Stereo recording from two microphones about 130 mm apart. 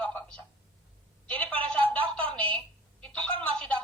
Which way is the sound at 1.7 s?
10° left (ahead or behind).